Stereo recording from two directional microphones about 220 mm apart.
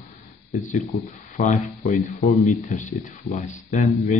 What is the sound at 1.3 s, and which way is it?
Speech, 30° left (ahead or behind).